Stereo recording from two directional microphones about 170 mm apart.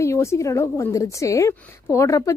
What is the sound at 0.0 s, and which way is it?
A woman's voice, 15° left (ahead or behind).